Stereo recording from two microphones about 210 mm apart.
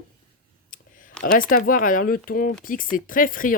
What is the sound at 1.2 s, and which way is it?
Speech, 40° left (ahead or behind).